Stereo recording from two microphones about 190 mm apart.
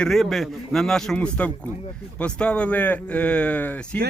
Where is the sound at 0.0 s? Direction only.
Centre (ahead or behind).